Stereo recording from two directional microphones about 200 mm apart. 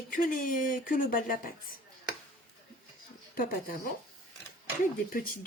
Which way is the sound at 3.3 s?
45° left (ahead or behind).